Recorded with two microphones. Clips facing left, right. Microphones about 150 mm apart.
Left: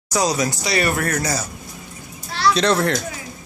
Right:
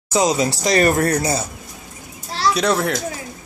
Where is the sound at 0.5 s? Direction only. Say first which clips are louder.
Right 5 dB; 40° right (ahead or behind).